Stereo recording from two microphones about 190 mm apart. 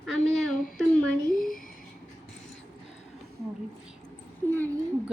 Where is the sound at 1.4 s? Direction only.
45° left (ahead or behind).